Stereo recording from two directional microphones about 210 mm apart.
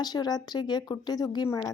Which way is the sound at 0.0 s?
20° left (ahead or behind).